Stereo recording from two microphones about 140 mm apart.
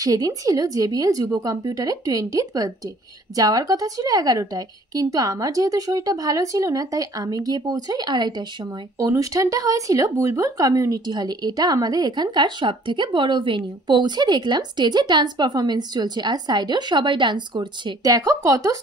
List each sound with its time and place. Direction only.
0.0 s a woman's voice: 25° right (ahead or behind)